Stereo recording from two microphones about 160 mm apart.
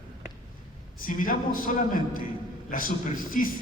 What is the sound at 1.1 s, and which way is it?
A man's voice, 60° left (ahead or behind).